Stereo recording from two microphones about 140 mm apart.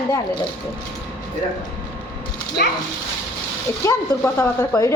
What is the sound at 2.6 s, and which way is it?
Speech, 90° left.